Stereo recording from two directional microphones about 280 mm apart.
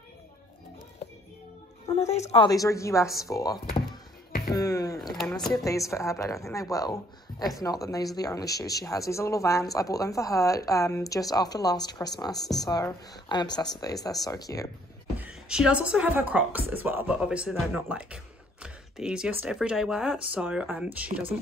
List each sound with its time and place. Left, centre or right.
2.0 s speech: left
4.6 s a sound: centre
5.0 s speech: centre
15.1 s speech: centre